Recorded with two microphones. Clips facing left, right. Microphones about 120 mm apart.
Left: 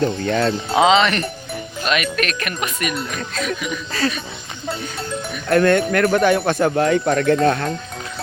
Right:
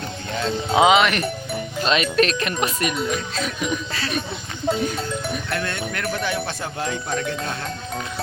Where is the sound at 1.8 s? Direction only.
25° right (ahead or behind).